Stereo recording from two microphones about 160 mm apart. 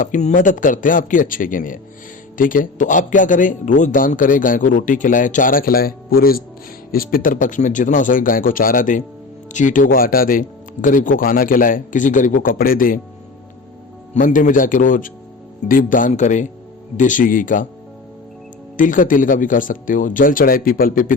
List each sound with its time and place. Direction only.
0.0 s a man's voice: 50° left (ahead or behind)
14.1 s a man's voice: 50° left (ahead or behind)
18.8 s a man's voice: 55° left (ahead or behind)